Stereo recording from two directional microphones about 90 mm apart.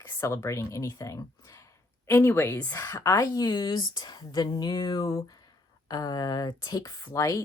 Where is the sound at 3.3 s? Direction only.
50° left (ahead or behind).